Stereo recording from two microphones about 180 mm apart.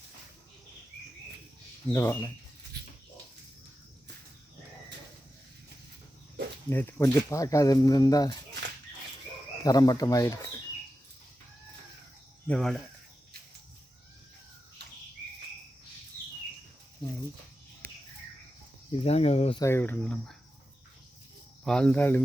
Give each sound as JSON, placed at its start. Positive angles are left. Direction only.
{"t": 1.9, "sound": "speech", "side_deg": 15}
{"t": 6.7, "sound": "speech", "side_deg": 10}
{"t": 9.6, "sound": "speech", "side_deg": 20}
{"t": 12.5, "sound": "speech", "side_deg": 5}
{"t": 18.9, "sound": "speech", "side_deg": 35}
{"t": 19.5, "sound": "speech", "side_deg": 15}
{"t": 21.6, "sound": "speech", "side_deg": 5}